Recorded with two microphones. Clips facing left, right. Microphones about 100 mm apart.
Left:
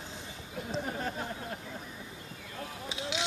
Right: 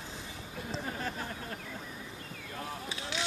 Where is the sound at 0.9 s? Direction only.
20° left (ahead or behind).